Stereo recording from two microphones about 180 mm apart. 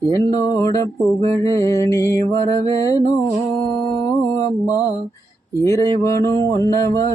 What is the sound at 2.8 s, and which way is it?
Music, 20° left (ahead or behind).